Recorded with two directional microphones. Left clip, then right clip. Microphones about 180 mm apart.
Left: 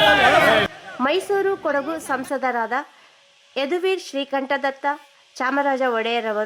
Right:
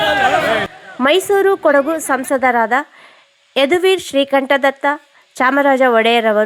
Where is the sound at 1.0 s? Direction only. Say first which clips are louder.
Right 8 dB; 25° right (ahead or behind).